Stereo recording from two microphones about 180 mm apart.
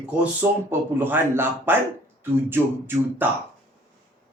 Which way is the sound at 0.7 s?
10° right (ahead or behind).